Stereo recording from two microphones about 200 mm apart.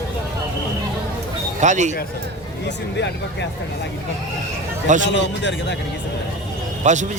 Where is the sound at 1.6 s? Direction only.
35° right (ahead or behind).